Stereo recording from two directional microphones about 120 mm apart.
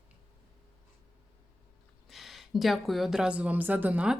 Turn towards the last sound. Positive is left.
turn(degrees=-10)  # may be behind; listen again after turning